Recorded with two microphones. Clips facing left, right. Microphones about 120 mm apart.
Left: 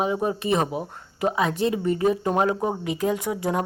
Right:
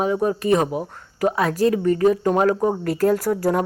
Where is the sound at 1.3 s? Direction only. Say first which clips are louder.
Right 4 dB; 20° left (ahead or behind).